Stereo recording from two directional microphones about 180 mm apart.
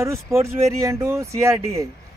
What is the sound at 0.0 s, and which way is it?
Speech, 15° right (ahead or behind).